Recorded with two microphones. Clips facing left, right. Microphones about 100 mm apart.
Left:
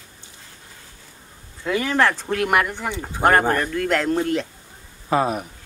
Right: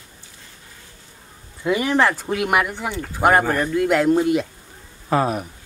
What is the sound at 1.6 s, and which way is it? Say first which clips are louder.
Speech: right 2 dB; 10° right (ahead or behind).